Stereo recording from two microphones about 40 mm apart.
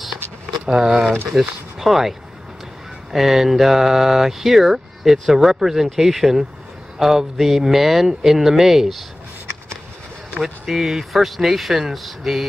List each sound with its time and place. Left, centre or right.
0.7 s speech: centre
1.3 s speech: centre
10.7 s speech: centre